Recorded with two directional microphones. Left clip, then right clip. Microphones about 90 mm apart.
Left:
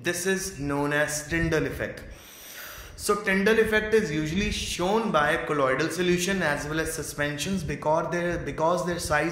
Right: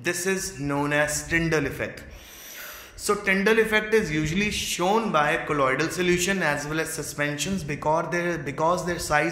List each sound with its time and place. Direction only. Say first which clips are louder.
0.0 s a man's voice: right 1 dB; 20° right (ahead or behind)
3.1 s a man's voice: right 1 dB; 20° right (ahead or behind)
3.4 s a man's voice: right 1 dB; 35° right (ahead or behind)
5.1 s a man's voice: right 1 dB; 20° right (ahead or behind)